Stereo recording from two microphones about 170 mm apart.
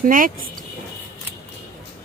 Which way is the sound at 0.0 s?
55° right (ahead or behind).